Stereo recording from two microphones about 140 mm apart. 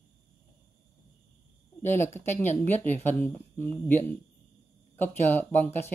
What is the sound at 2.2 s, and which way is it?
Speech, 15° left (ahead or behind).